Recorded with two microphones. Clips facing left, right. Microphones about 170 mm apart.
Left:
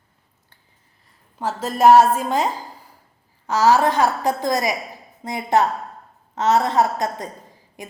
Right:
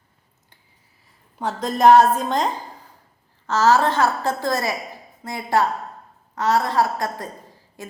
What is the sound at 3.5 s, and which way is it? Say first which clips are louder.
A woman's voice: left 1 dB; 10° left (ahead or behind).